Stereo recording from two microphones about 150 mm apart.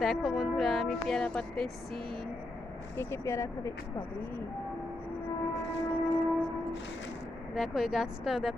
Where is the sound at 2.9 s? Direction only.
15° left (ahead or behind).